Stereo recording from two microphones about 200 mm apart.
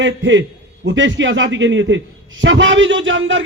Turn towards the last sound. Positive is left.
turn(degrees=-70)  # may be behind; listen again after turning